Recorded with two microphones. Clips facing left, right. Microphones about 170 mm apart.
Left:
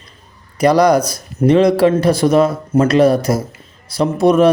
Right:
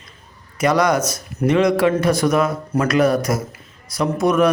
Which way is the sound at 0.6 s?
35° left (ahead or behind).